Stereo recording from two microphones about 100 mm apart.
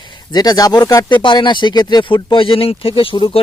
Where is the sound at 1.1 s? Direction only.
50° left (ahead or behind).